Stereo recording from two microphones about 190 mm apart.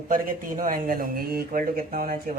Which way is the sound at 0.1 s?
45° right (ahead or behind).